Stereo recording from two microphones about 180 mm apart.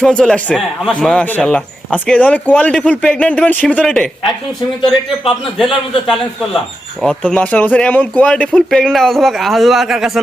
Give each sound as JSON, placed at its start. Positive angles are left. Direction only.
{"t": 0.0, "sound": "a man's voice", "side_deg": 5}
{"t": 7.0, "sound": "speech", "side_deg": 5}